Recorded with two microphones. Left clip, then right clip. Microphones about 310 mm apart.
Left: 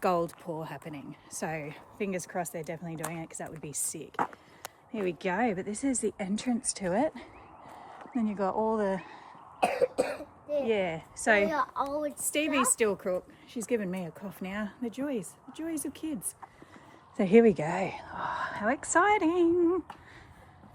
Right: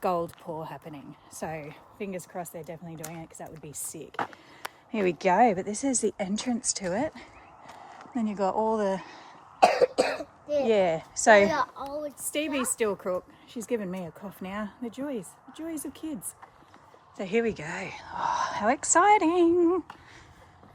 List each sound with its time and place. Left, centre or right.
0.0 s a woman's voice: centre
4.9 s speech: right; by 9.3 s centre
9.6 s speech: right
12.3 s a woman's voice: centre
17.2 s a woman's voice: left; by 20.0 s centre